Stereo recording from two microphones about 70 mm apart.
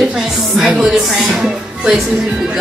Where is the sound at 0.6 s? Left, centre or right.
Centre.